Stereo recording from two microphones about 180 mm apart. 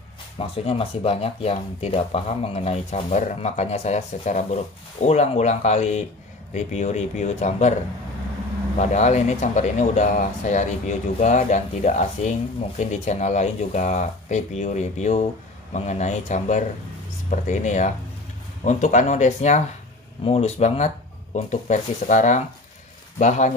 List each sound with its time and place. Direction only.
0.4 s speech: 30° left (ahead or behind)
8.7 s speech: 40° left (ahead or behind)